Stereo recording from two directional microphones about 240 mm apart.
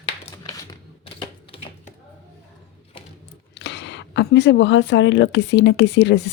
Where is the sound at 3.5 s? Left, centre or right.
Left.